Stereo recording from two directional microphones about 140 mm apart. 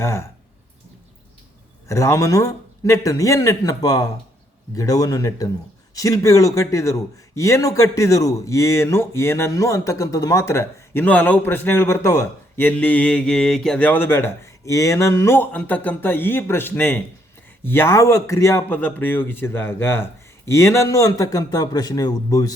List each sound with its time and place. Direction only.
0.0 s a man's voice: 20° left (ahead or behind)
1.9 s a man's voice: 20° left (ahead or behind)